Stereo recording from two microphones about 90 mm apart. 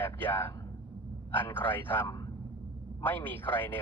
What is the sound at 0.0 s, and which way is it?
Speech, 20° left (ahead or behind).